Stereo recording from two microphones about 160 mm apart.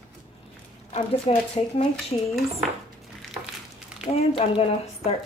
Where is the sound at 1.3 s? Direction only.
40° left (ahead or behind).